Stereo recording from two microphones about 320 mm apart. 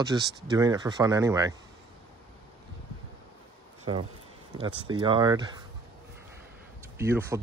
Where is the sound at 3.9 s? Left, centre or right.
Centre.